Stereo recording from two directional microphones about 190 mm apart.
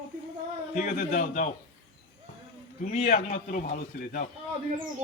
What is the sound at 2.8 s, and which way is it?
A man's voice, 40° left (ahead or behind).